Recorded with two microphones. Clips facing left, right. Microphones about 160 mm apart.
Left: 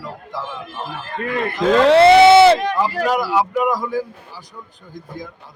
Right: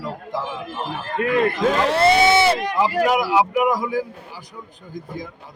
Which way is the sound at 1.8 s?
65° left (ahead or behind).